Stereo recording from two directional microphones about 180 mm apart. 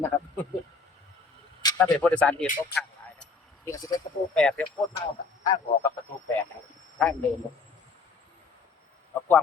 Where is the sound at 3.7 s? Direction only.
20° left (ahead or behind).